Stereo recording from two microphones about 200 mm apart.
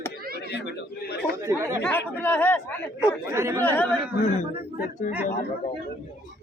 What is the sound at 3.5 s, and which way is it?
Speech, 10° left (ahead or behind).